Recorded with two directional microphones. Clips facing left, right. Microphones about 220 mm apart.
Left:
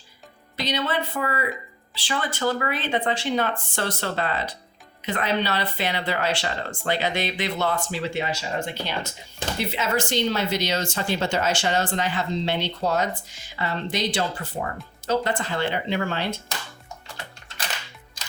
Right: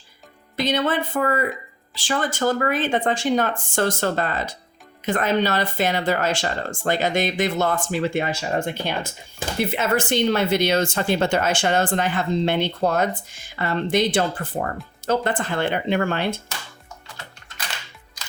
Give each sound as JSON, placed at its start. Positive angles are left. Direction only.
{"t": 0.5, "sound": "speech", "side_deg": -50}